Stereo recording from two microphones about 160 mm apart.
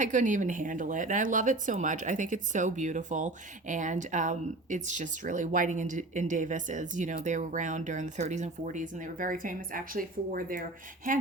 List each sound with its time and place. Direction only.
0.0 s speech: 50° right (ahead or behind)